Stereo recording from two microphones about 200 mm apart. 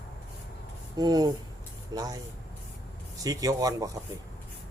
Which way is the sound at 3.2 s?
20° right (ahead or behind).